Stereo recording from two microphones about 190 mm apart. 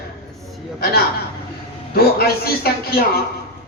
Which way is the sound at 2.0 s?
55° left (ahead or behind).